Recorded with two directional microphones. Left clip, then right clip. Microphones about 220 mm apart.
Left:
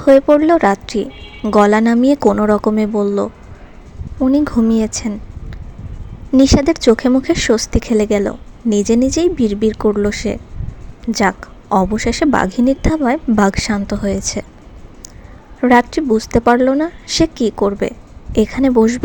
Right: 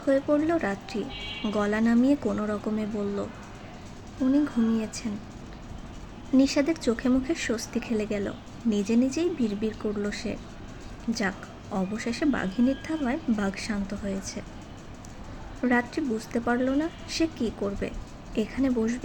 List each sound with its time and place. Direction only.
0.0 s a woman's voice: 35° left (ahead or behind)
4.3 s a woman's voice: 40° left (ahead or behind)
6.3 s a woman's voice: 35° left (ahead or behind)
15.6 s a woman's voice: 35° left (ahead or behind)